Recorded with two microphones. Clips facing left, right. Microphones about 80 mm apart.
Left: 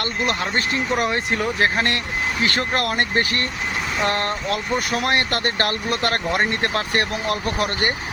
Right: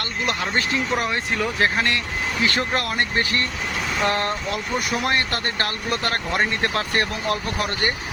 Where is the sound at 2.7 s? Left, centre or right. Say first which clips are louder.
Left 2 dB; left.